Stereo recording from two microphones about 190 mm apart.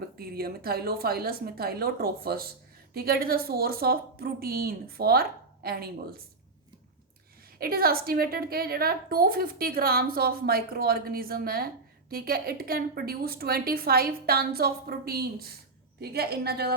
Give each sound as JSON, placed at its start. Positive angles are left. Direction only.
{"t": 0.2, "sound": "a woman's voice", "side_deg": -55}
{"t": 7.6, "sound": "a woman's voice", "side_deg": -50}